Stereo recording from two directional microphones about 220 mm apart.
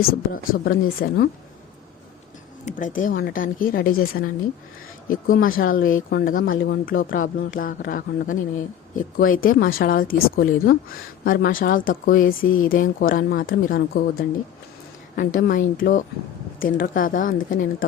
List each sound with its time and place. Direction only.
0.0 s speech: 45° left (ahead or behind)
2.6 s speech: 35° left (ahead or behind)
5.0 s speech: 40° left (ahead or behind)